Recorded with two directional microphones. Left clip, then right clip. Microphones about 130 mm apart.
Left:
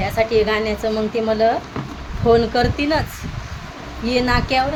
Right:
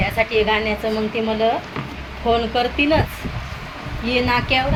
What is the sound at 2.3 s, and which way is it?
Speech, 50° left (ahead or behind).